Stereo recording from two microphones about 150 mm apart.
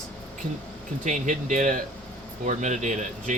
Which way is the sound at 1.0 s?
55° right (ahead or behind).